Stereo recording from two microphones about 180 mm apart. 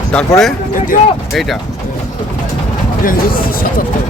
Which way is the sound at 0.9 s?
50° left (ahead or behind).